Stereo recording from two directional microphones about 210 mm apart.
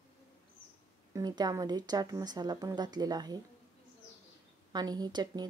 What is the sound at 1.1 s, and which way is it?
Speech, 15° right (ahead or behind).